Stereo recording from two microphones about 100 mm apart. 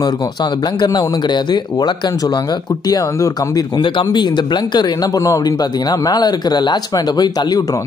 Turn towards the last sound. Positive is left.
turn(degrees=40)  # may be behind; listen again after turning